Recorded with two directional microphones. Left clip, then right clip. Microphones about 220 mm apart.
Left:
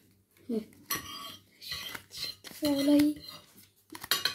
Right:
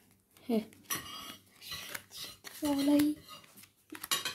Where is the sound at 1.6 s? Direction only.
5° right (ahead or behind).